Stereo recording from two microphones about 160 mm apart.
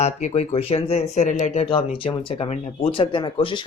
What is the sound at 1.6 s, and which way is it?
Speech, 35° left (ahead or behind).